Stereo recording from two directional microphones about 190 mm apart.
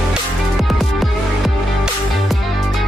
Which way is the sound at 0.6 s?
Centre (ahead or behind).